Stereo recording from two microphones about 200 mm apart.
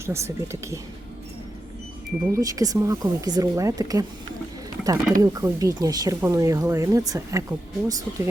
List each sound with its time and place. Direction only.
0.0 s speech: 15° right (ahead or behind)
2.3 s speech: 15° right (ahead or behind)